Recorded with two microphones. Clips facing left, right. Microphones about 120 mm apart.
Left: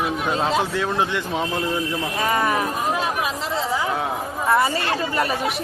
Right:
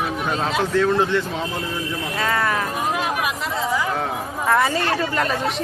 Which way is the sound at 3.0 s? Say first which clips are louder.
Even; 30° left (ahead or behind).